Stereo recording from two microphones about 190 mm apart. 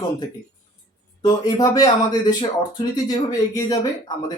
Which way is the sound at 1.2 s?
20° left (ahead or behind).